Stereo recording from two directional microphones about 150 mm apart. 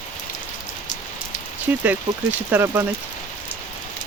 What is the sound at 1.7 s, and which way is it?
Speech, 10° right (ahead or behind).